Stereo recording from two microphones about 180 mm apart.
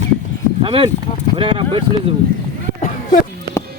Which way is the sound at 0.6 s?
30° right (ahead or behind).